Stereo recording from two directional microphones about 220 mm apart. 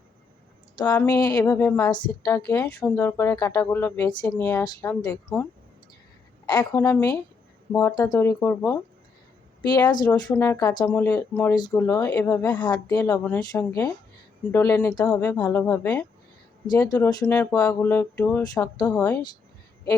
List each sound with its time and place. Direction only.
0.8 s speech: 15° left (ahead or behind)
6.4 s speech: 20° left (ahead or behind)
12.5 s speech: 20° left (ahead or behind)